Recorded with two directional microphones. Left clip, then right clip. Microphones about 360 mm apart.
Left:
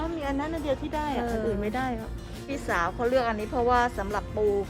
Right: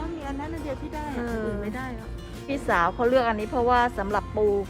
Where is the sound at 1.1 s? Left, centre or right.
Centre.